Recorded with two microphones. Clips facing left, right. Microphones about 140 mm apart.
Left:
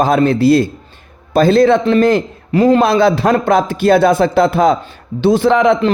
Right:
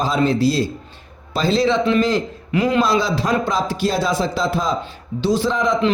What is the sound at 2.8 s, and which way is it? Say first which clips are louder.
A man's voice: left 7 dB; 60° left (ahead or behind).